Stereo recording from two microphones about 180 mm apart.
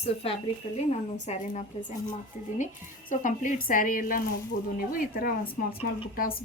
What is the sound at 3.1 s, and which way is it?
Speech, 45° left (ahead or behind).